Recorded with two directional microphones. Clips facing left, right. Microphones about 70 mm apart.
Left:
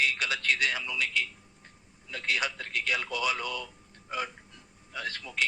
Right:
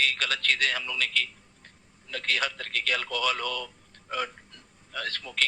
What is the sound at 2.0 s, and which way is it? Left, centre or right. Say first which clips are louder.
A man's voice: right 2 dB; centre.